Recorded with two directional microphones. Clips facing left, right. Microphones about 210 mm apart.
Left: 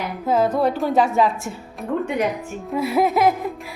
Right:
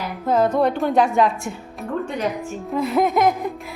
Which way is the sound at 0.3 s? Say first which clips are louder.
Right 1 dB; 5° left (ahead or behind).